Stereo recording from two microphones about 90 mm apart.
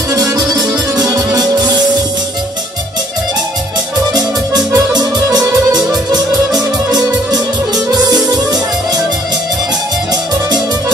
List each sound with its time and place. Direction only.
0.1 s music: 45° right (ahead or behind)
4.1 s music: 50° right (ahead or behind)